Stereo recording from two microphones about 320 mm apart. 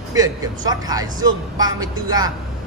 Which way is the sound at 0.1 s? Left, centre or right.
Centre.